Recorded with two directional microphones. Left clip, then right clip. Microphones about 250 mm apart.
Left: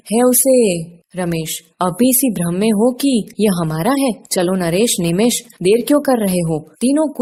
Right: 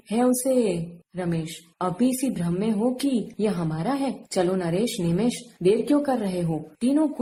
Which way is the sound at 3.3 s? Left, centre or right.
Left.